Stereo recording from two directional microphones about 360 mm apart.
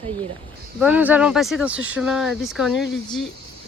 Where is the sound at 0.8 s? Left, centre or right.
Centre.